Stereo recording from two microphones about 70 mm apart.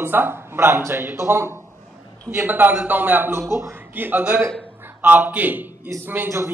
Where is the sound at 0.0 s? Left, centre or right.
Right.